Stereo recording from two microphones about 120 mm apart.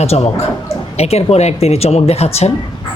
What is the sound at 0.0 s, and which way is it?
Speech, 60° left (ahead or behind).